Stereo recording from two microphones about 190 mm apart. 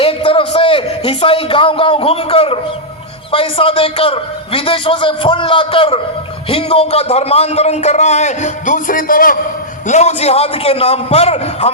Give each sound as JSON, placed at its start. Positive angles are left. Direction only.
{"t": 0.0, "sound": "a sound", "side_deg": 30}
{"t": 3.3, "sound": "a man's voice", "side_deg": 30}
{"t": 9.8, "sound": "a man's voice", "side_deg": 35}